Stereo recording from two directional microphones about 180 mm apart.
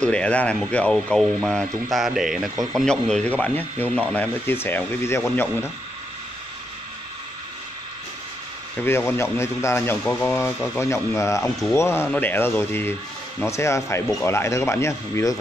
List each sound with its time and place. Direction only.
0.0 s speech: 5° left (ahead or behind)
2.5 s speech: 20° right (ahead or behind)
2.8 s speech: 5° left (ahead or behind)
8.7 s speech: 15° left (ahead or behind)